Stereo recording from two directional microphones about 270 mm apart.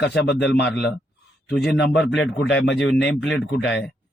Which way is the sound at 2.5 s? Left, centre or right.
Left.